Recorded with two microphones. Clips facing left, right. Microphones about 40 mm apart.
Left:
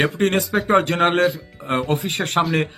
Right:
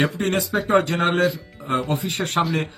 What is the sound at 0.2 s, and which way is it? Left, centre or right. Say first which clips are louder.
Speech: left 3 dB; left.